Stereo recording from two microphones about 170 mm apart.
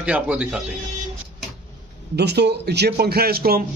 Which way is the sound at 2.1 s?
80° right.